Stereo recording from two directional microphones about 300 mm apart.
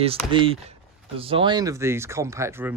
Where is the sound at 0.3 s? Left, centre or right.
Centre.